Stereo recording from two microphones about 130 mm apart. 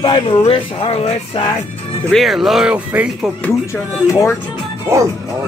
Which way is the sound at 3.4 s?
20° left (ahead or behind).